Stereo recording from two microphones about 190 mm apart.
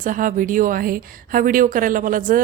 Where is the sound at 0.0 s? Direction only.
45° right (ahead or behind).